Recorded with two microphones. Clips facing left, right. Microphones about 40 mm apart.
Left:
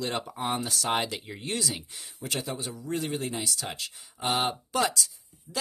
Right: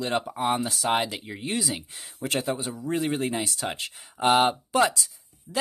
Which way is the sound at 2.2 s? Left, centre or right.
Right.